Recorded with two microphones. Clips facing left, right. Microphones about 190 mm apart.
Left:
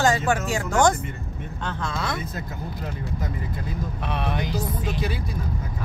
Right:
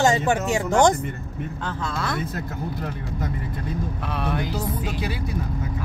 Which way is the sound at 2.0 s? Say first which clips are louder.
Right 3 dB; centre (ahead or behind).